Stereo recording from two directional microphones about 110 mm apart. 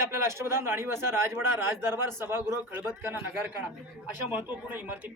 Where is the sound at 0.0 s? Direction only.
25° right (ahead or behind).